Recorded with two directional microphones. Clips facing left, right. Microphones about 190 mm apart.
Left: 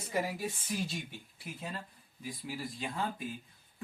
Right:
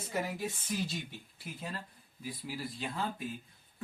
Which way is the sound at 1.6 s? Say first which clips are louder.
Even; 10° left (ahead or behind).